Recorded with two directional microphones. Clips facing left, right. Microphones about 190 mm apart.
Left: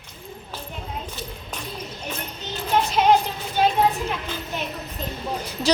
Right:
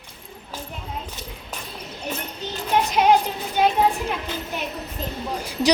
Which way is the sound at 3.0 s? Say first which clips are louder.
Right 1 dB; 10° right (ahead or behind).